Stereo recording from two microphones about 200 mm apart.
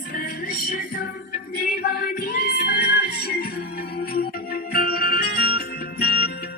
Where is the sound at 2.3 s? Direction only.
55° left (ahead or behind).